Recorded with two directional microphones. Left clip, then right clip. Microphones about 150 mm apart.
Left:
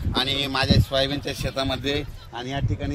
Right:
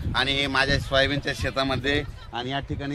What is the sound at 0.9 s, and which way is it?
Speech, 20° left (ahead or behind).